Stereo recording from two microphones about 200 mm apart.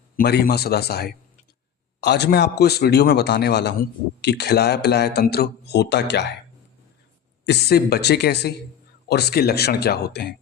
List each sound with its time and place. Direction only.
0.2 s a man's voice: 50° left (ahead or behind)
7.4 s a man's voice: 55° left (ahead or behind)